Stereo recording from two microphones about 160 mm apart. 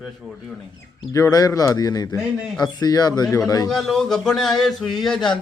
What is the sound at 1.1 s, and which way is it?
Speech, 20° left (ahead or behind).